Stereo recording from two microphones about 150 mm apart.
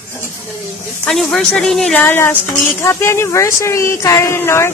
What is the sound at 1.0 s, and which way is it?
A woman's voice, centre (ahead or behind).